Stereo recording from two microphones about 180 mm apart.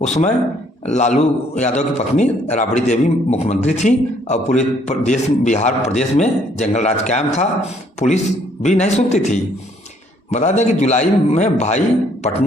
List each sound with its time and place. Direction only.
0.0 s a man's voice: 40° left (ahead or behind)